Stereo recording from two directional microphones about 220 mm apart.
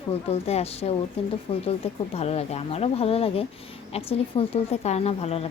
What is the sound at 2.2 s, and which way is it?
A woman's voice, 30° left (ahead or behind).